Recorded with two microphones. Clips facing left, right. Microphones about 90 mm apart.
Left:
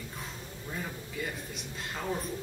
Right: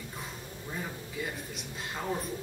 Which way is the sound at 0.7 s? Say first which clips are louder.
Even; 5° right (ahead or behind).